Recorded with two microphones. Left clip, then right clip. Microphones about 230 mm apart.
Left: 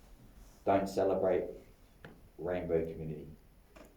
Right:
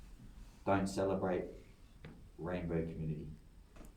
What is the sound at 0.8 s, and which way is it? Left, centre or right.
Speech, centre.